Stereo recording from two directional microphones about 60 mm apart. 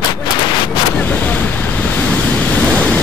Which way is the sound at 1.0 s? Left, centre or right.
Left.